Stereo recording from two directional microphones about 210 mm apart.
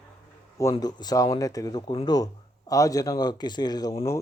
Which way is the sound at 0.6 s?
15° left (ahead or behind).